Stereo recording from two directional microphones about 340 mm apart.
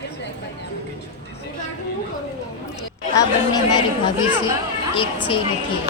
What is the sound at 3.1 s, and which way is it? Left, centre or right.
Speech, centre.